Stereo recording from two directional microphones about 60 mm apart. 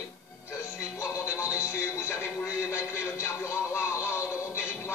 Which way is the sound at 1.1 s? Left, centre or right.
Left.